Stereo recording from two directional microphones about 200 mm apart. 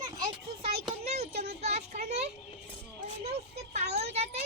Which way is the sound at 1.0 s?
30° right (ahead or behind).